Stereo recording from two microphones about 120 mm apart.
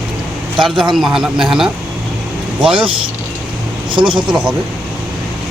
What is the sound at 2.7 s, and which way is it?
Speech, 45° right (ahead or behind).